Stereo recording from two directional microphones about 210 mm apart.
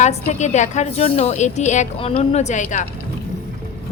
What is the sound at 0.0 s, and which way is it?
A woman's voice, 35° left (ahead or behind).